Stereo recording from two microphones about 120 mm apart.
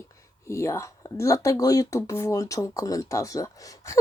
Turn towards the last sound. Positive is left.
turn(degrees=25)  # may be behind; listen again after turning